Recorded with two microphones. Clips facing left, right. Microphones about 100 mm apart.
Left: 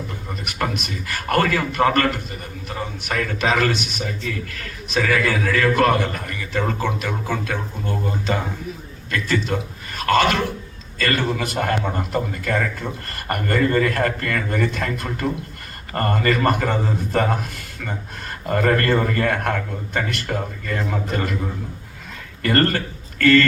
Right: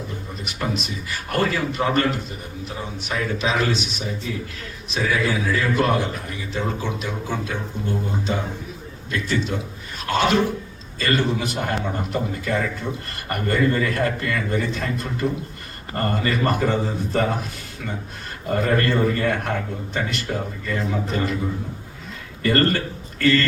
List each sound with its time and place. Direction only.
0.4 s a man's voice: 60° left (ahead or behind)
22.4 s a man's voice: 55° left (ahead or behind)